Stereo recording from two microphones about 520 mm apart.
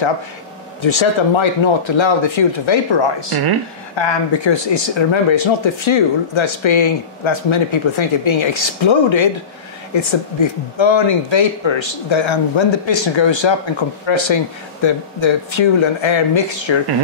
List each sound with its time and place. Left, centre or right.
0.8 s speech: left